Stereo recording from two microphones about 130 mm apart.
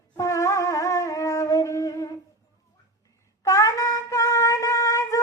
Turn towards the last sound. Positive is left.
turn(degrees=25)  # may be behind; listen again after turning